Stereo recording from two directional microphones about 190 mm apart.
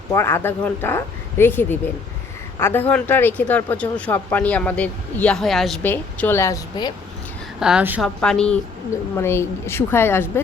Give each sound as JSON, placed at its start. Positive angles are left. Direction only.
{"t": 0.1, "sound": "speech", "side_deg": 15}
{"t": 7.6, "sound": "a woman's voice", "side_deg": -5}
{"t": 8.2, "sound": "a woman's voice", "side_deg": 5}